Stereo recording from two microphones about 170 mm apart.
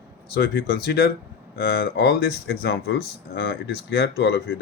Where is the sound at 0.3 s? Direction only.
65° left (ahead or behind).